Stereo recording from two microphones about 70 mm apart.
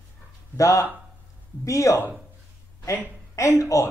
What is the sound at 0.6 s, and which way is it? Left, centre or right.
Speech, left.